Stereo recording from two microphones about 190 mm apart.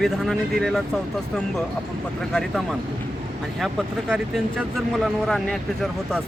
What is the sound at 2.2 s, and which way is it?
Speech, centre (ahead or behind).